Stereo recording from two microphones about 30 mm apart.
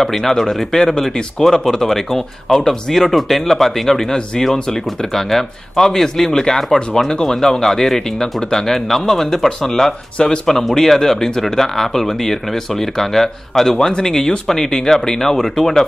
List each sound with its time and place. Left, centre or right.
0.0 s speech: centre
10.1 s speech: left
10.4 s speech: centre